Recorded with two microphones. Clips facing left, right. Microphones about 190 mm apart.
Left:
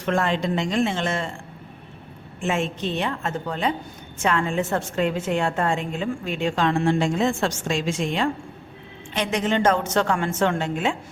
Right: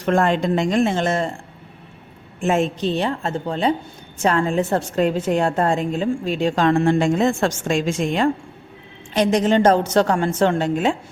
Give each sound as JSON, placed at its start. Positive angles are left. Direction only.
{"t": 0.0, "sound": "speech", "side_deg": -45}
{"t": 2.4, "sound": "a woman's voice", "side_deg": -40}